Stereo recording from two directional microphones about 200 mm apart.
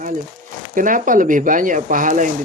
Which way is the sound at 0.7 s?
40° right (ahead or behind).